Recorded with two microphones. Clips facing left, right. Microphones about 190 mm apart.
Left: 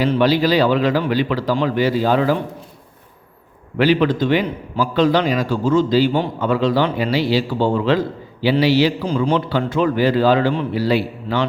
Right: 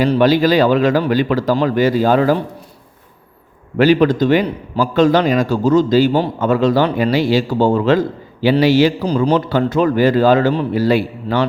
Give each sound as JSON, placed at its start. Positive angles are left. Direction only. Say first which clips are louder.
{"t": 0.0, "sound": "a man's voice", "louder": "right 3 dB", "side_deg": -45}
{"t": 3.8, "sound": "a man's voice", "louder": "right 4 dB", "side_deg": -45}